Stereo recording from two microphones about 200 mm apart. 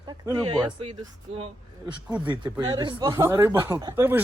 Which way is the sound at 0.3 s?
25° right (ahead or behind).